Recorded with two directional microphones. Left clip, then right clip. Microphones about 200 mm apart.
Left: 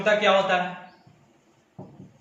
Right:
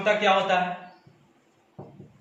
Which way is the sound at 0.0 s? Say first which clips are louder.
Left 1 dB; 15° left (ahead or behind).